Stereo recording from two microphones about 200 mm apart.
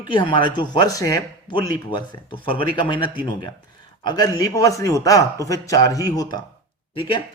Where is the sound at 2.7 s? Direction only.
25° left (ahead or behind).